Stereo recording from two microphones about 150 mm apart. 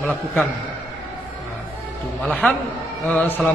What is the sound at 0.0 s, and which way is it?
Speech, 10° left (ahead or behind).